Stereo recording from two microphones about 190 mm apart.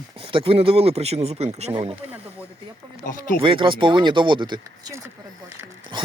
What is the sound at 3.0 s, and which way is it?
Speech, 45° left (ahead or behind).